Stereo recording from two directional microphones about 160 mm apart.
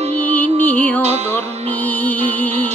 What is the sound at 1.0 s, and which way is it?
Music, 40° right (ahead or behind).